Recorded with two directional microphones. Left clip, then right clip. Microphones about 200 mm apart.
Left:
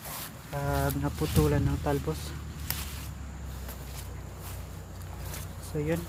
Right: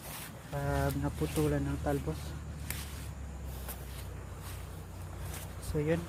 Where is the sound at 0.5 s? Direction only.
Centre (ahead or behind).